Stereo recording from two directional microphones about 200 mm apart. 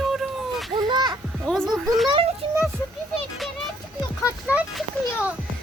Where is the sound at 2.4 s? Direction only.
25° right (ahead or behind).